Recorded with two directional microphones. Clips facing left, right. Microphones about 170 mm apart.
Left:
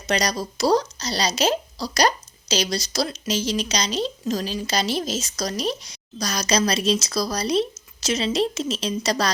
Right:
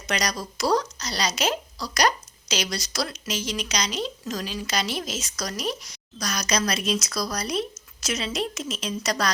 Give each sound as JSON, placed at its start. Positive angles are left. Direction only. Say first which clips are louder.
{"t": 0.1, "sound": "speech", "louder": "left 4 dB", "side_deg": 30}